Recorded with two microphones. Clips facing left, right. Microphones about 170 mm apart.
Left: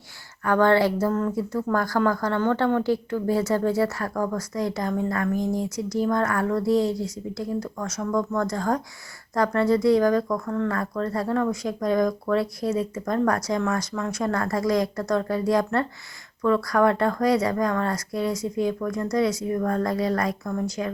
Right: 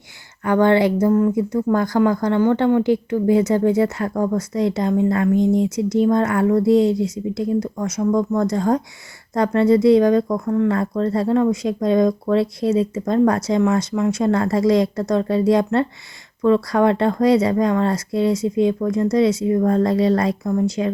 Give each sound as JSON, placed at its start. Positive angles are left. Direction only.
{"t": 0.4, "sound": "speech", "side_deg": -20}